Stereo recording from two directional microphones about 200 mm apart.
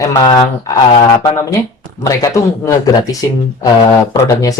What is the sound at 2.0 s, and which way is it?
Speech, 15° left (ahead or behind).